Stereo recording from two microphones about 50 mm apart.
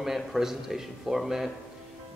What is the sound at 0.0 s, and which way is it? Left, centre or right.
A man's voice, centre.